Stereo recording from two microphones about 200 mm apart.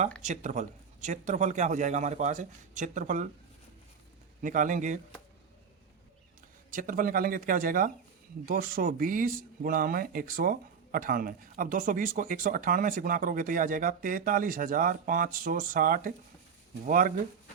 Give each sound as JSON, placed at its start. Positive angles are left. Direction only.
{"t": 0.2, "sound": "speech", "side_deg": -35}
{"t": 4.4, "sound": "speech", "side_deg": -40}
{"t": 6.7, "sound": "speech", "side_deg": -40}